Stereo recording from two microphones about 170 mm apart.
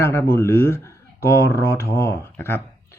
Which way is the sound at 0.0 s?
15° left (ahead or behind).